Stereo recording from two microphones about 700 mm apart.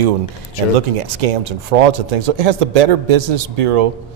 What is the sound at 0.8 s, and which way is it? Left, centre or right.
Speech, right.